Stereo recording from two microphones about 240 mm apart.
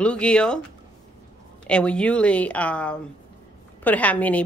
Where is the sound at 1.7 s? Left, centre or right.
Centre.